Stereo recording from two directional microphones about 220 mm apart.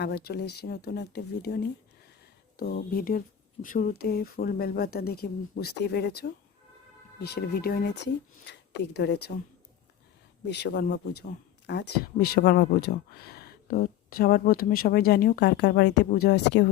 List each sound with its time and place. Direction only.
0.0 s speech: 45° left (ahead or behind)
2.6 s speech: 45° left (ahead or behind)
10.4 s speech: 50° left (ahead or behind)